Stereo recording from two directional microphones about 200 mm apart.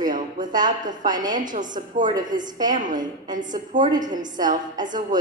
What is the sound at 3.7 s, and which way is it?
A woman's voice, 20° right (ahead or behind).